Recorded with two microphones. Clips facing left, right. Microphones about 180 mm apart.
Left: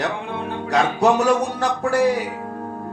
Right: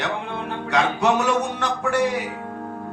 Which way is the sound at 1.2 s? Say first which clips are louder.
Left 3 dB; 35° left (ahead or behind).